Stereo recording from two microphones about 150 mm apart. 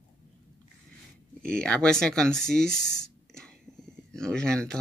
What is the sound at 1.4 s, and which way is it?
Speech, 5° left (ahead or behind).